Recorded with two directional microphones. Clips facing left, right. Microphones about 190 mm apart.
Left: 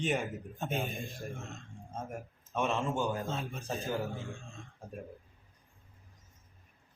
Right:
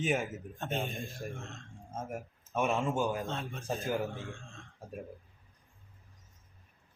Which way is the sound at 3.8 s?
15° right (ahead or behind).